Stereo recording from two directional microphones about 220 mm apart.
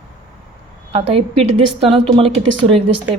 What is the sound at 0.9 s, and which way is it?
A woman's voice, 25° right (ahead or behind).